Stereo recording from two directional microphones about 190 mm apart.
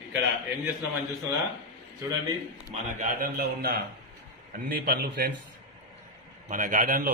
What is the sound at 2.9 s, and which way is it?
A man's voice, 45° right (ahead or behind).